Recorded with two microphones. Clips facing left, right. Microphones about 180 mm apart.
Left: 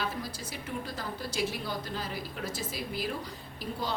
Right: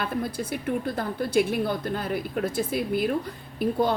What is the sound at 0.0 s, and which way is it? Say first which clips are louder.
A woman's voice: right 7 dB; 55° right (ahead or behind).